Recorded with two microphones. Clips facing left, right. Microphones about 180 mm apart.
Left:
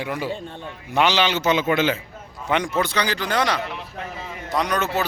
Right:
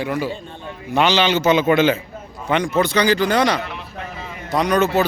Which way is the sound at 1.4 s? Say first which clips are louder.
Right 7 dB; 55° right (ahead or behind).